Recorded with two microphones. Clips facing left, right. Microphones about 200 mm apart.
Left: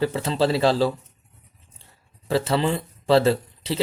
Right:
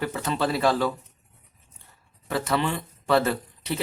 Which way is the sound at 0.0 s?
25° left (ahead or behind).